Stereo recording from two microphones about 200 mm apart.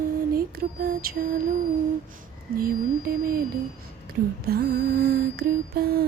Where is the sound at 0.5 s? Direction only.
45° right (ahead or behind).